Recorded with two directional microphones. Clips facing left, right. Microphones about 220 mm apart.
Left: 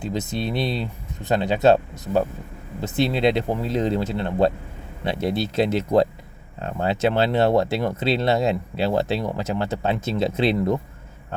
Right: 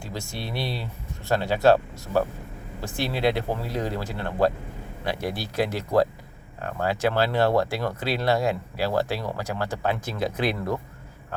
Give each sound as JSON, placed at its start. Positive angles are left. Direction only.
{"t": 0.0, "sound": "speech", "side_deg": 20}